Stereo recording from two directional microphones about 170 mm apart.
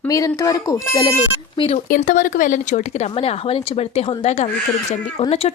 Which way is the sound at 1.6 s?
35° left (ahead or behind).